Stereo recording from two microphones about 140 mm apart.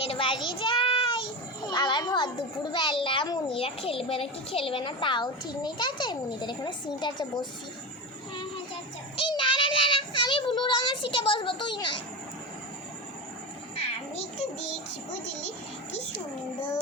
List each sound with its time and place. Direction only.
0.0 s child singing: 40° left (ahead or behind)
1.6 s a child's voice: 30° left (ahead or behind)
9.1 s child singing: 35° left (ahead or behind)
13.7 s a sound: 45° left (ahead or behind)